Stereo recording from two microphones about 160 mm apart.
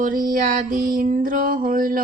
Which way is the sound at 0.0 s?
60° right (ahead or behind).